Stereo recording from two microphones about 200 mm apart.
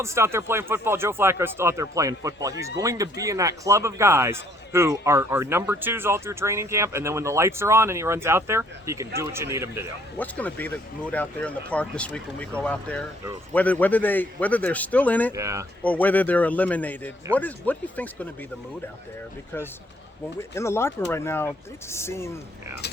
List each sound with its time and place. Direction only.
0.0 s speech: 15° right (ahead or behind)
10.2 s speech: 10° left (ahead or behind)
15.3 s speech: 15° right (ahead or behind)
15.8 s speech: 5° left (ahead or behind)
20.6 s speech: 15° left (ahead or behind)